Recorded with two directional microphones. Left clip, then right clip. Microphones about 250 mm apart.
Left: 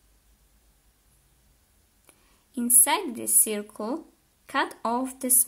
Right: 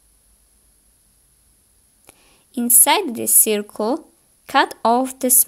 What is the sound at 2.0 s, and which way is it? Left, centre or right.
A woman's voice, right.